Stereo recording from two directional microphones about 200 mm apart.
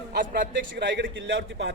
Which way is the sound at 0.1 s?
45° right (ahead or behind).